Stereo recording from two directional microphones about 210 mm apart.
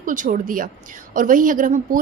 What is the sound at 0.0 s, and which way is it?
A woman's voice, 40° right (ahead or behind).